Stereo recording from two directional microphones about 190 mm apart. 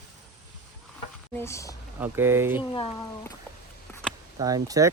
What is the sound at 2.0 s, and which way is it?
Speech, 10° right (ahead or behind).